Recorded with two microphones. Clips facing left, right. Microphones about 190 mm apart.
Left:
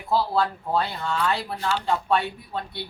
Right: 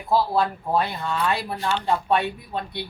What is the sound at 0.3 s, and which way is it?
Speech, 15° right (ahead or behind).